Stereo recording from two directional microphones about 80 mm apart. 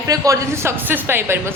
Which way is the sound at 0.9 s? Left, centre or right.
Right.